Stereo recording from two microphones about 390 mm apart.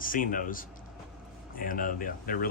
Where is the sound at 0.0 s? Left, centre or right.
Left.